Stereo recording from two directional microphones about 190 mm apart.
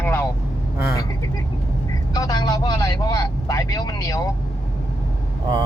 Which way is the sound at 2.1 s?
20° left (ahead or behind).